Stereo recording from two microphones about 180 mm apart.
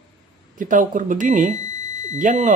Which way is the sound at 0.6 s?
45° right (ahead or behind).